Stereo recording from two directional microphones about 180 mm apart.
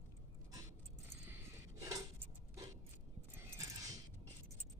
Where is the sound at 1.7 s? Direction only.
20° right (ahead or behind).